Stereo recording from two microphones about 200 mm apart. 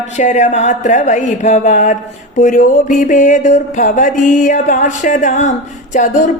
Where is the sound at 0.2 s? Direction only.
35° left (ahead or behind).